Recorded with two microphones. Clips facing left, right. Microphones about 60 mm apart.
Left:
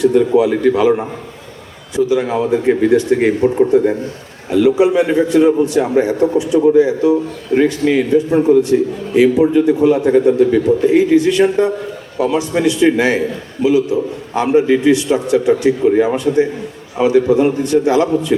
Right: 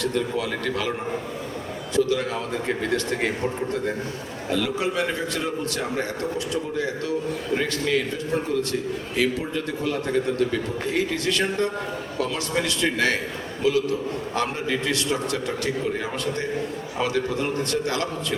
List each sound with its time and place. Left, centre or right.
0.0 s a man's voice: centre
2.0 s a man's voice: centre